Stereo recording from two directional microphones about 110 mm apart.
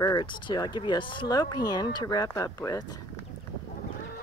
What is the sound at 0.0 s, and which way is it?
Speech, 40° left (ahead or behind).